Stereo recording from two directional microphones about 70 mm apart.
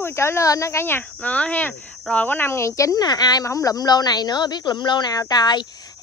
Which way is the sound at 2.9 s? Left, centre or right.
Left.